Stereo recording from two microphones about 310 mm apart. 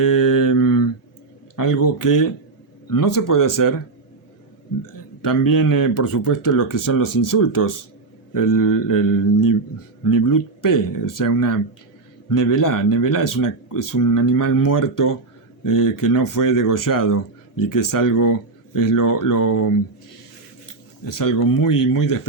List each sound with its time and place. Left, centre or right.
0.0 s mantra: left
1.5 s speech: left
5.4 s speech: left
21.0 s speech: left